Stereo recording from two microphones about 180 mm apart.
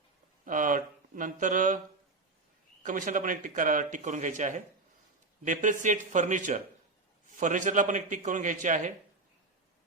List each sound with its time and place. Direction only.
0.4 s speech: 45° right (ahead or behind)
2.8 s speech: 45° right (ahead or behind)